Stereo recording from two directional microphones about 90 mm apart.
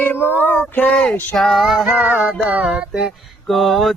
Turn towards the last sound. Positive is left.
turn(degrees=0)  # may be behind; listen again after turning